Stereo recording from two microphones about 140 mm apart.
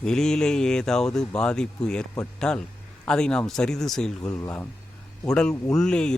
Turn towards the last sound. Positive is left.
turn(degrees=5)  # may be behind; listen again after turning